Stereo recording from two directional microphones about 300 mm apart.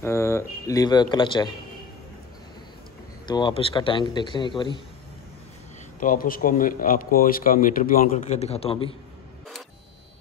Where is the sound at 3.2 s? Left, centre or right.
Centre.